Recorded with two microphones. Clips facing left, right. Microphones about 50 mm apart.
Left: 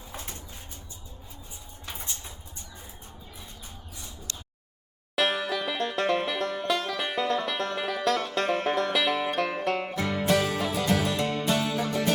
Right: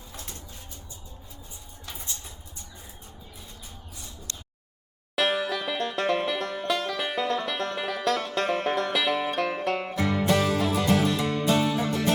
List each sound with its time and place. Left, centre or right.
0.1 s bird: left
5.1 s banjo: centre
11.3 s music: centre